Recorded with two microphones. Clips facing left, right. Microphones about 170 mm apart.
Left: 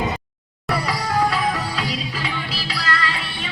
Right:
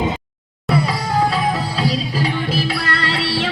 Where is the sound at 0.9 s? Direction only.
25° right (ahead or behind).